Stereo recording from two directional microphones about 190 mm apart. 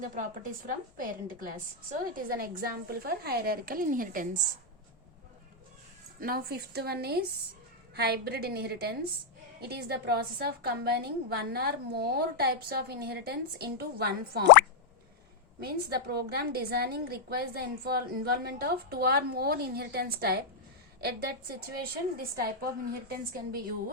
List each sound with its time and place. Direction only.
0.2 s a woman's voice: 45° right (ahead or behind)
6.1 s a woman's voice: 50° right (ahead or behind)
15.6 s a woman's voice: 55° right (ahead or behind)